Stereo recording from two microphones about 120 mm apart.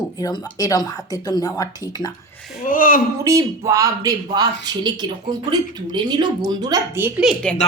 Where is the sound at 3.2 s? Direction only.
25° right (ahead or behind).